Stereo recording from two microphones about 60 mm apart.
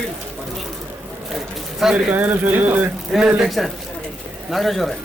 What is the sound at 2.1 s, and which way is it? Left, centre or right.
Speech, right.